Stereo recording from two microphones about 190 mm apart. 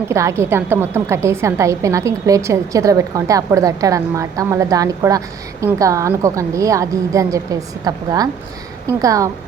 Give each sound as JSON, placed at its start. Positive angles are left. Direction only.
{"t": 0.1, "sound": "a woman's voice", "side_deg": -15}